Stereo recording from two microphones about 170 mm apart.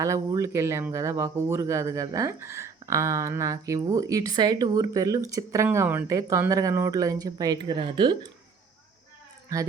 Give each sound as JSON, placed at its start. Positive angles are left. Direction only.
{"t": 0.0, "sound": "speech", "side_deg": -20}